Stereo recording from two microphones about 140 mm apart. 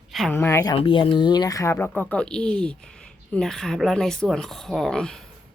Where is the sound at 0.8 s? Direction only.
40° left (ahead or behind); by 5.2 s 5° left (ahead or behind).